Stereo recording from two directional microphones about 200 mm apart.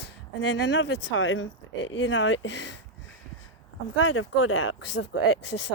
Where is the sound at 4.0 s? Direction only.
80° left; by 5.7 s 60° left (ahead or behind).